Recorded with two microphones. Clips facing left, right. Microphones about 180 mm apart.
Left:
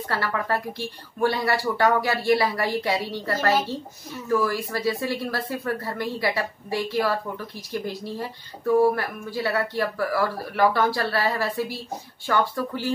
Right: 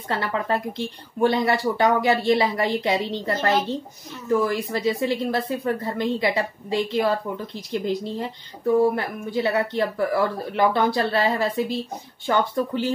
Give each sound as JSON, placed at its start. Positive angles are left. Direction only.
{"t": 0.1, "sound": "a woman's voice", "side_deg": -20}